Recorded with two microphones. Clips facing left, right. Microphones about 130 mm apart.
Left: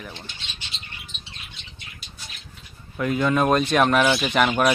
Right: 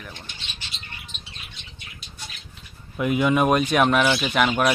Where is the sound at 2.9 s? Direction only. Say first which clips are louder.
Right 1 dB; 15° right (ahead or behind).